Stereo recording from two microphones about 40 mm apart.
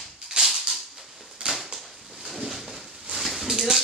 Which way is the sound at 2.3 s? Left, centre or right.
Centre.